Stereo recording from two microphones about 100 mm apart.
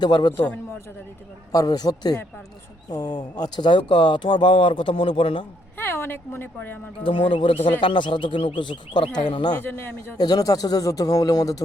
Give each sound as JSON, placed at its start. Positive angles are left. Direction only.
{"t": 0.0, "sound": "speech", "side_deg": 45}
{"t": 0.3, "sound": "a man's voice", "side_deg": 15}
{"t": 1.5, "sound": "speech", "side_deg": 40}
{"t": 5.7, "sound": "a woman's voice", "side_deg": 20}
{"t": 7.0, "sound": "speech", "side_deg": 60}
{"t": 9.6, "sound": "a man's voice", "side_deg": 20}
{"t": 10.2, "sound": "speech", "side_deg": 40}